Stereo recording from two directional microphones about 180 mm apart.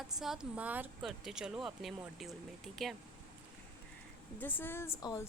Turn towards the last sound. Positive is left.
turn(degrees=15)  # may be behind; listen again after turning